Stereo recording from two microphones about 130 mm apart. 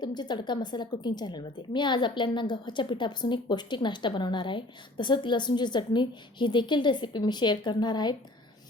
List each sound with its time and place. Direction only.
0.0 s a woman's voice: 35° left (ahead or behind)